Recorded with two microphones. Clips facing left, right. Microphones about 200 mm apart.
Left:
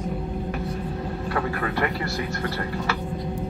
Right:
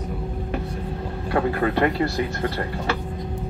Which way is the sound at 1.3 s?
25° right (ahead or behind).